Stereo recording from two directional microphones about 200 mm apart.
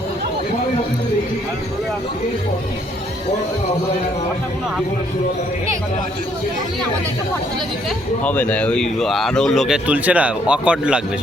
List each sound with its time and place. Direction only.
7.9 s speech: 5° left (ahead or behind)